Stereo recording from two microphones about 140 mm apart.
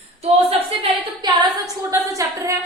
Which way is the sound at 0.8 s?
30° right (ahead or behind).